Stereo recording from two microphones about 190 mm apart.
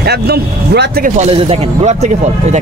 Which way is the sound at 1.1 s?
35° right (ahead or behind).